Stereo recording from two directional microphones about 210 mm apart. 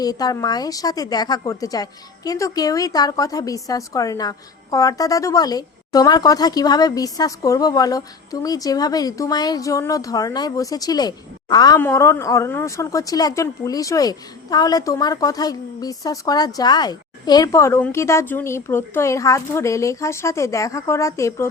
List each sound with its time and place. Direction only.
0.0 s speech: 20° left (ahead or behind)